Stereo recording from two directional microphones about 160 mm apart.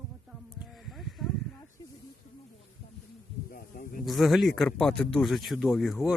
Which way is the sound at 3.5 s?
65° left (ahead or behind).